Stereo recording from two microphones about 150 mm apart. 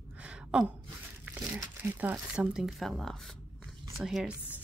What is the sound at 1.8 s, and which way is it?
A woman's voice, 10° right (ahead or behind).